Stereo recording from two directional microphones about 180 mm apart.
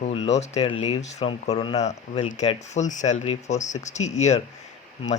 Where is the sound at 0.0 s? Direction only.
35° left (ahead or behind).